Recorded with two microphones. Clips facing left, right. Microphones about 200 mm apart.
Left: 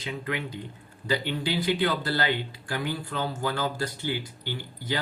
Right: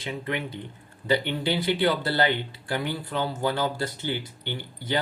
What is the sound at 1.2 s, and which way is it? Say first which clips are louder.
Speech: right 1 dB; 20° right (ahead or behind).